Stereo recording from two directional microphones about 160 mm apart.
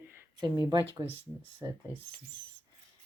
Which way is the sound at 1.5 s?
15° right (ahead or behind).